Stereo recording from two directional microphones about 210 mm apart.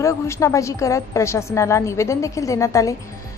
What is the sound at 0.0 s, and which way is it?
A woman's voice, 15° left (ahead or behind).